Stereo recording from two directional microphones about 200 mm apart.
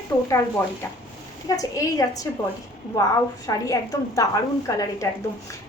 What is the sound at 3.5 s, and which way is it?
A woman's voice, 20° left (ahead or behind).